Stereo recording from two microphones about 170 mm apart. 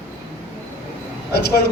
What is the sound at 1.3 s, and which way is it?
Speech, 65° left (ahead or behind).